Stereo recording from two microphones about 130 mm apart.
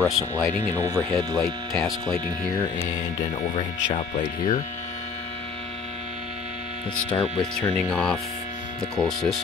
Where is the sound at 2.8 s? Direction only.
80° left.